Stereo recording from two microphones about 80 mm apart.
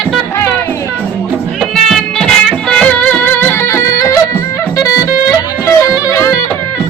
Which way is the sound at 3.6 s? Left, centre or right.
Left.